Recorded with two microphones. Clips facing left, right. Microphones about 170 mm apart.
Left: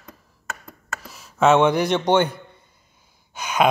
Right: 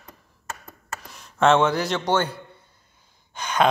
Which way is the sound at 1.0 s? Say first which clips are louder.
Left 2 dB; 5° left (ahead or behind).